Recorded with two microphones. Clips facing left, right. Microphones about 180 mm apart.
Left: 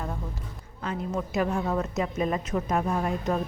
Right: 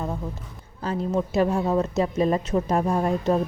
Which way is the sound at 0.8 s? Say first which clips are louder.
Right 5 dB; 35° right (ahead or behind).